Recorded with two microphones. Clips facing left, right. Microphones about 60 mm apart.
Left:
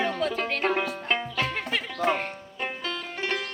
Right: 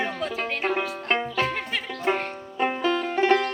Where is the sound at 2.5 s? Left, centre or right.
Centre.